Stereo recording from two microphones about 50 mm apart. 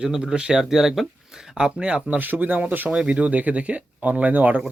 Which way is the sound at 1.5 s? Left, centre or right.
Right.